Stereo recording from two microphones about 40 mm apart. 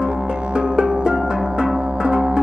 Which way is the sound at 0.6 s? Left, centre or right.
Right.